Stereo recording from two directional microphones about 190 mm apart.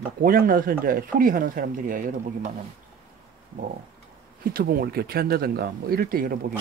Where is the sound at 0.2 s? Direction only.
50° right (ahead or behind).